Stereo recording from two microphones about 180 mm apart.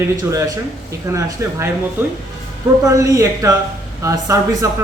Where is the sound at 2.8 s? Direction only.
20° right (ahead or behind).